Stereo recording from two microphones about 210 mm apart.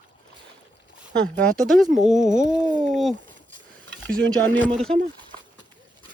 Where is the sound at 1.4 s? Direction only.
Centre (ahead or behind).